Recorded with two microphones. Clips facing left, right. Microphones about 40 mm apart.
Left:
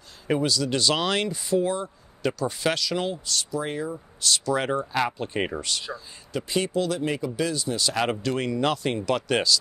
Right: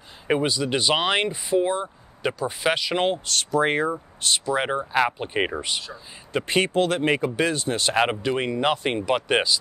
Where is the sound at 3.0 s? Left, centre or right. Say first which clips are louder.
Right 5 dB; right.